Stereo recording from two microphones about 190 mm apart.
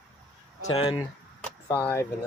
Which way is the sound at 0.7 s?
30° left (ahead or behind).